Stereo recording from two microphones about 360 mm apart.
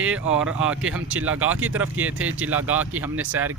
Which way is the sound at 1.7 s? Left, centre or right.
Centre.